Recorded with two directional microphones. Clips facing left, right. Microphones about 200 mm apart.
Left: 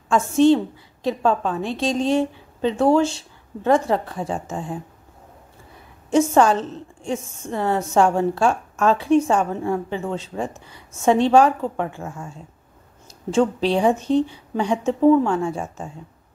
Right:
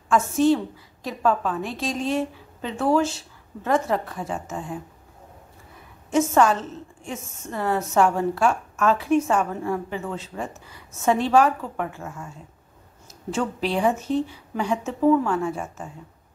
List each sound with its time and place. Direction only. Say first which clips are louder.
0.1 s a woman's voice: left 4 dB; 25° left (ahead or behind)
6.0 s a woman's voice: left 3 dB; 30° left (ahead or behind)
13.3 s a woman's voice: left 6 dB; 25° left (ahead or behind)